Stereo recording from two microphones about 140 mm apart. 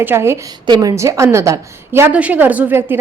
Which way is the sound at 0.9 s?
20° right (ahead or behind).